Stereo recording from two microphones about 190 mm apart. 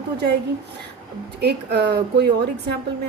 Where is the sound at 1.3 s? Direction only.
60° right (ahead or behind).